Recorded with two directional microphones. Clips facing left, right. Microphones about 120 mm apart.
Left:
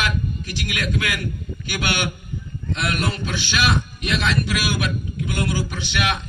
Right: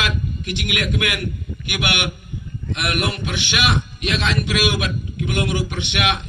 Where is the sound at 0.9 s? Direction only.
15° right (ahead or behind).